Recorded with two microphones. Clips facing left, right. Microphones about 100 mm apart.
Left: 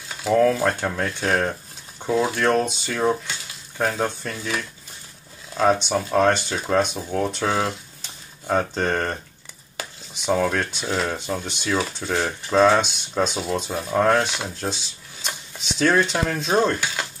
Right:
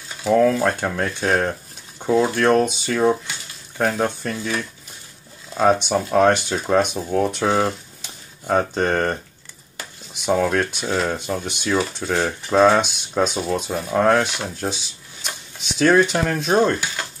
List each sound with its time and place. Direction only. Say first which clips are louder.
0.2 s speech: right 2 dB; centre (ahead or behind)
5.5 s speech: right 2 dB; 15° right (ahead or behind)
10.2 s speech: right 2 dB; 5° right (ahead or behind)
14.6 s shuffling cards: right 2 dB; 5° right (ahead or behind)
15.8 s speech: right 4 dB; 5° right (ahead or behind)